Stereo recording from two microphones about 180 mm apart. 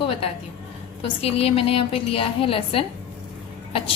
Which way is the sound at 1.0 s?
35° left (ahead or behind).